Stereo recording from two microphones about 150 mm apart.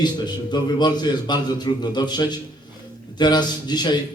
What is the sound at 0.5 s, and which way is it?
A man's voice, 30° left (ahead or behind).